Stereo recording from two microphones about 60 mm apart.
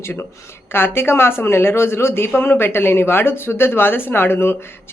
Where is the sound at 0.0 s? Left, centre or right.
Left.